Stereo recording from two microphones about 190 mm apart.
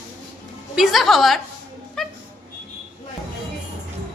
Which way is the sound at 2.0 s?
Centre (ahead or behind).